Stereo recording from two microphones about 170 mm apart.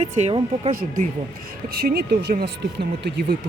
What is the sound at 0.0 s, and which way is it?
Speech, 40° right (ahead or behind).